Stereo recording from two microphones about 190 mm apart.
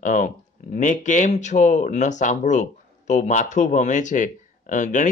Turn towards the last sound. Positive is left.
turn(degrees=40)  # may be behind; listen again after turning